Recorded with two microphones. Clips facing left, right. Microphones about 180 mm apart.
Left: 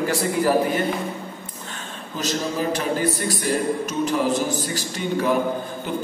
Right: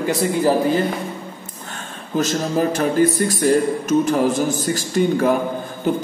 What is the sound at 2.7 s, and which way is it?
A man's voice, 45° right (ahead or behind).